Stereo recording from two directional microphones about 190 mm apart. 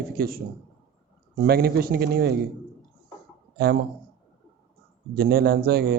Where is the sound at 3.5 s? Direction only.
55° right (ahead or behind).